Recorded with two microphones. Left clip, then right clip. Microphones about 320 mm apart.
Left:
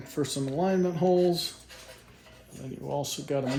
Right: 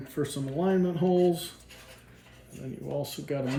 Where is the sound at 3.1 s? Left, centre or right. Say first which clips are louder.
Left 2 dB; centre.